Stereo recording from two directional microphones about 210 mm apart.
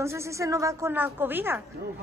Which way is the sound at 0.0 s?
15° right (ahead or behind).